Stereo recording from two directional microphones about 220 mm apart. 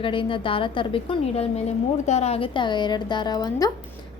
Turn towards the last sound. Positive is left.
turn(degrees=15)  # may be behind; listen again after turning